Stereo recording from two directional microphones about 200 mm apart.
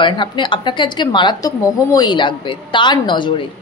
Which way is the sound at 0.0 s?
25° left (ahead or behind).